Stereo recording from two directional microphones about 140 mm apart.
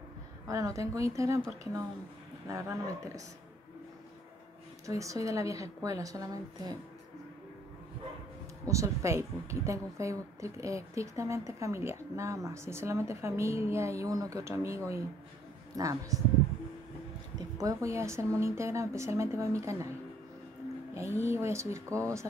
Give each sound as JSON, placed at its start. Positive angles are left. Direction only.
{"t": 0.5, "sound": "a woman's voice", "side_deg": -25}
{"t": 2.4, "sound": "a woman's voice", "side_deg": -25}
{"t": 4.8, "sound": "a woman's voice", "side_deg": -20}
{"t": 8.6, "sound": "a woman's voice", "side_deg": -20}
{"t": 17.4, "sound": "a woman's voice", "side_deg": -25}
{"t": 20.9, "sound": "a woman's voice", "side_deg": -20}